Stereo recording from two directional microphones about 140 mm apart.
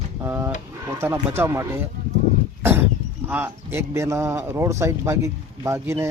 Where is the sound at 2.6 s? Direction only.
15° right (ahead or behind).